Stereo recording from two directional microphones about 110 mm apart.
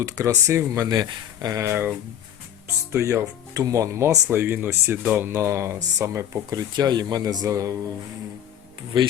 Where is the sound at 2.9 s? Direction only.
25° right (ahead or behind).